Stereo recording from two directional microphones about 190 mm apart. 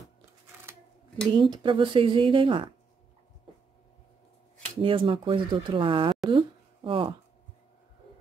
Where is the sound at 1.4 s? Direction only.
25° right (ahead or behind).